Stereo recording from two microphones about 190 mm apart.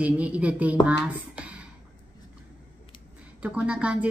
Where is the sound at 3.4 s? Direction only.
5° right (ahead or behind).